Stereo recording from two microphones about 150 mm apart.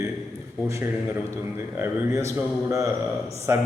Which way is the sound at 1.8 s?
20° right (ahead or behind).